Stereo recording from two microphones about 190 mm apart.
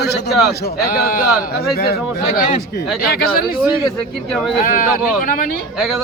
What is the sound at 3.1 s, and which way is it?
Speech, 55° left (ahead or behind).